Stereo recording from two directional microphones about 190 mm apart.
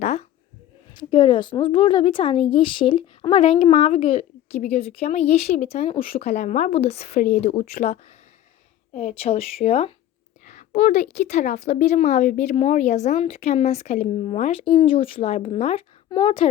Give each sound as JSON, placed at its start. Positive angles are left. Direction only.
{"t": 0.0, "sound": "a sound", "side_deg": 35}
{"t": 0.9, "sound": "a woman's voice", "side_deg": 25}
{"t": 9.0, "sound": "a woman's voice", "side_deg": 35}